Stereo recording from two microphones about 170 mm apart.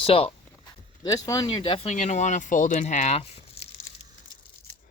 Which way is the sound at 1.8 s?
40° left (ahead or behind).